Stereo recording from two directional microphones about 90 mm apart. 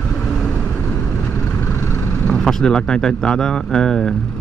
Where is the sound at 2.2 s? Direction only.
5° left (ahead or behind).